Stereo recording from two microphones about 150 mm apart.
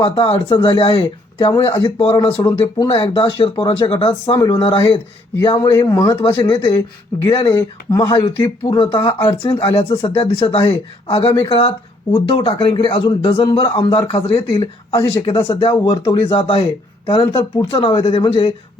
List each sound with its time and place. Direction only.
0.0 s a man's voice: 35° left (ahead or behind)
2.8 s a man's voice: 35° left (ahead or behind)
6.7 s speech: 15° left (ahead or behind)
9.1 s a man's voice: 40° left (ahead or behind)